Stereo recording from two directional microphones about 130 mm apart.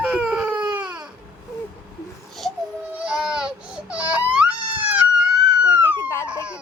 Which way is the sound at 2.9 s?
5° right (ahead or behind).